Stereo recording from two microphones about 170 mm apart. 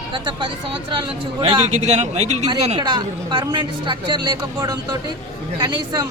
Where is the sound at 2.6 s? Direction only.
25° right (ahead or behind).